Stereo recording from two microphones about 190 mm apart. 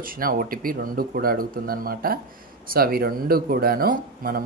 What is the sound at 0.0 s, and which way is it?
Speech, 50° right (ahead or behind).